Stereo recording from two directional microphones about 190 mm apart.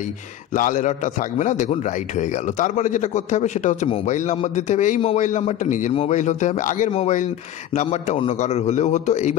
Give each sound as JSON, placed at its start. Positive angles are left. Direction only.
{"t": 0.5, "sound": "a man's voice", "side_deg": 45}